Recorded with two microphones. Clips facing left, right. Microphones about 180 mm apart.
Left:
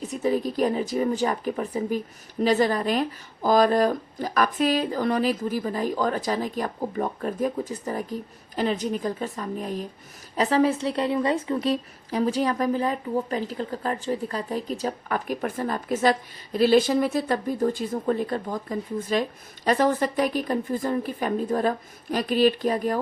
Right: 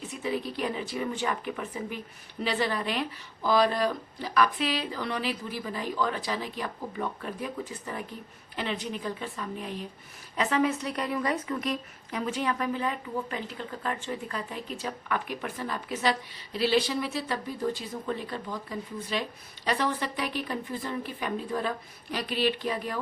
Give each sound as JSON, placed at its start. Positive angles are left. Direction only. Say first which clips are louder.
{"t": 0.0, "sound": "a woman's voice", "louder": "left 7 dB", "side_deg": 40}